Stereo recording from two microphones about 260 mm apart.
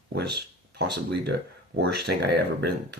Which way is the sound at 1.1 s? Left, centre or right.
Right.